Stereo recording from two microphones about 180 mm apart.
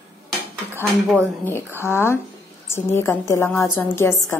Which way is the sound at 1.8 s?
15° left (ahead or behind).